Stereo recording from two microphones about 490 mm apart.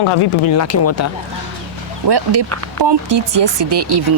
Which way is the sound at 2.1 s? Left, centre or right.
Right.